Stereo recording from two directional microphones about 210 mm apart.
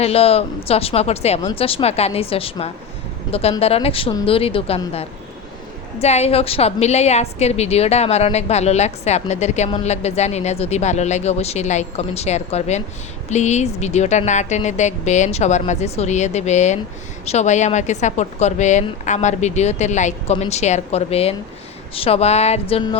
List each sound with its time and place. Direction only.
0.0 s a woman's voice: 30° left (ahead or behind)